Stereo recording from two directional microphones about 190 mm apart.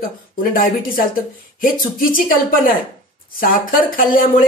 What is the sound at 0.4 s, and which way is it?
Speech, 45° left (ahead or behind).